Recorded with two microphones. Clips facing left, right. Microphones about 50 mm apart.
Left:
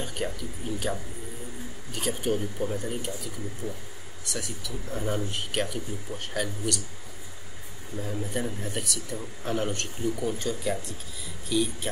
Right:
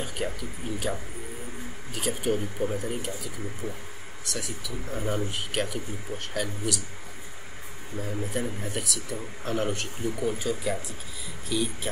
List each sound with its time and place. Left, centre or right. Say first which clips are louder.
0.0 s speech: even; centre
3.6 s speech: even; right
4.2 s speech: even; centre
8.0 s speech: even; centre